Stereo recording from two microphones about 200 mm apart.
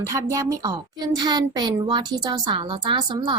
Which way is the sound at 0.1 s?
15° right (ahead or behind).